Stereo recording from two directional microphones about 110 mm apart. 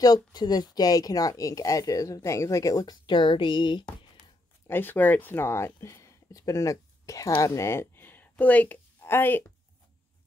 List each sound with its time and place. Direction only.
0.0 s speech: 35° left (ahead or behind)
4.6 s speech: 20° left (ahead or behind)